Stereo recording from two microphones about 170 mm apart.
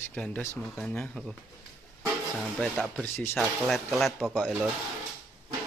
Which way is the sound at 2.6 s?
5° left (ahead or behind).